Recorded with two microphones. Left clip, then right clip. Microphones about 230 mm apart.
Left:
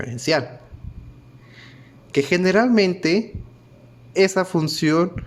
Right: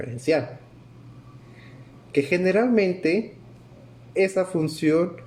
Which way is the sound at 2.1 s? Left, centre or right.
Left.